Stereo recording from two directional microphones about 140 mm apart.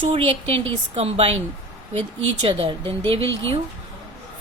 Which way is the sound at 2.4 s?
40° right (ahead or behind).